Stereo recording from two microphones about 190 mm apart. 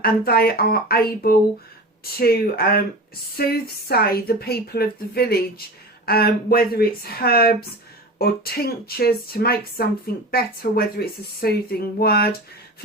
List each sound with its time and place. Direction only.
0.0 s a woman's voice: 55° left (ahead or behind)